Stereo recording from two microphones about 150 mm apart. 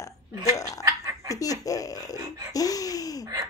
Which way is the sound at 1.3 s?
25° left (ahead or behind).